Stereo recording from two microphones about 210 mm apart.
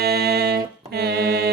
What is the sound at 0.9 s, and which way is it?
Music, 50° right (ahead or behind).